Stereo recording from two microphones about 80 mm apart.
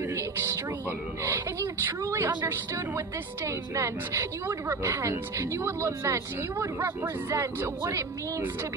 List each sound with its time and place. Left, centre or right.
1.2 s a woman's voice: right